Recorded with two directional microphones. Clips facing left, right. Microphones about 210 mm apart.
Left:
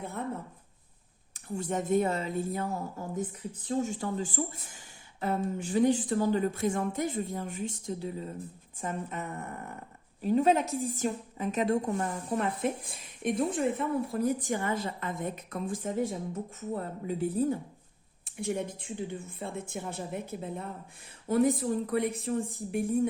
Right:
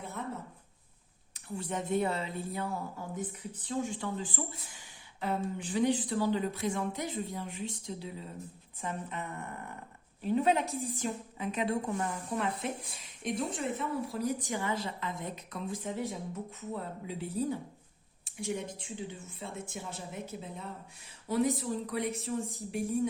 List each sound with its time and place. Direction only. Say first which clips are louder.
1.3 s a woman's voice: left 4 dB; 45° left (ahead or behind)